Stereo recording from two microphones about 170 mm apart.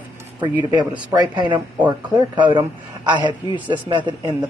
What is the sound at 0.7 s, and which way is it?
A man's voice, 25° right (ahead or behind).